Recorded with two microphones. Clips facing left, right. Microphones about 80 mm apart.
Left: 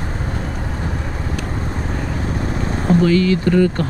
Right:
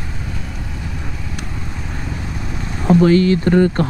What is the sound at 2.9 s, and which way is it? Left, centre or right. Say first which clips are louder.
Speech: right 3 dB; right.